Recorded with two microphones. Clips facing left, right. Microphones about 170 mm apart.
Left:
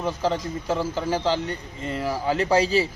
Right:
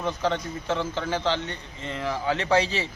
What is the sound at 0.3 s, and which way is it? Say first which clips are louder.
A man's voice: left 2 dB; 5° left (ahead or behind).